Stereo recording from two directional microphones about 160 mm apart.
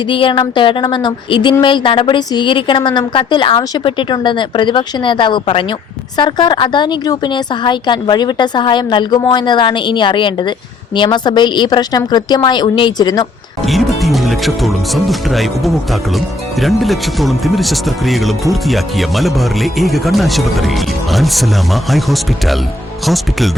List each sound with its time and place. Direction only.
0.1 s a sound: 30° left (ahead or behind)
1.6 s a woman's voice: 30° left (ahead or behind)
14.0 s speech: centre (ahead or behind)